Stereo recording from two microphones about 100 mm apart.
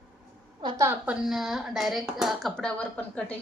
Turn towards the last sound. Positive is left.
turn(degrees=15)  # may be behind; listen again after turning